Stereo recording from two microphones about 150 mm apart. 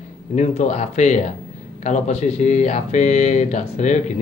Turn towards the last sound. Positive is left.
turn(degrees=50)  # may be behind; listen again after turning